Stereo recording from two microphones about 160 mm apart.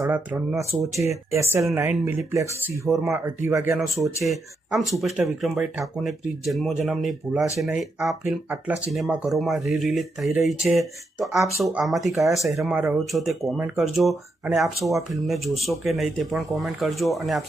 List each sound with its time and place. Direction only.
0.0 s speech: 10° right (ahead or behind)
3.8 s speech: centre (ahead or behind)